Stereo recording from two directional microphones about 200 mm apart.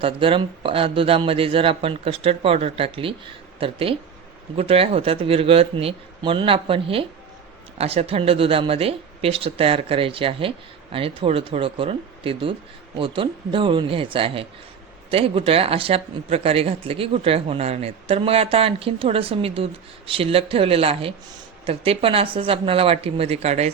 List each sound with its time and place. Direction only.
0.0 s speech: 25° right (ahead or behind)